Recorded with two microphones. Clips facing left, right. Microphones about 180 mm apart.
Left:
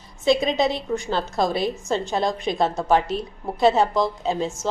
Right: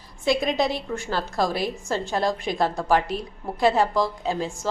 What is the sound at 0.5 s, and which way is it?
A woman's voice, 20° left (ahead or behind).